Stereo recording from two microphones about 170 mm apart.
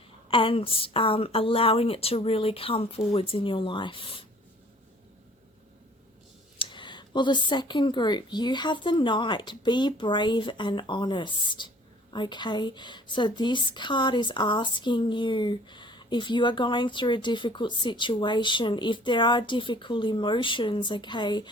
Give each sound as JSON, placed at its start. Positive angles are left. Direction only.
{"t": 0.3, "sound": "a woman's voice", "side_deg": 30}
{"t": 6.6, "sound": "a woman's voice", "side_deg": 30}